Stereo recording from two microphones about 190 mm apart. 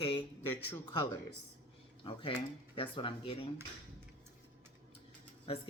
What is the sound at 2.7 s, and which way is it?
Speech, 25° left (ahead or behind).